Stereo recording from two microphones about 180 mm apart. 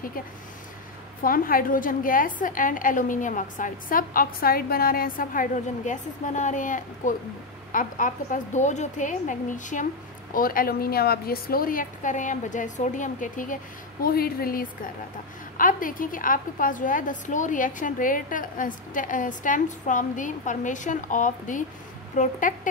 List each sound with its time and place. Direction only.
1.2 s a woman's voice: 50° left (ahead or behind)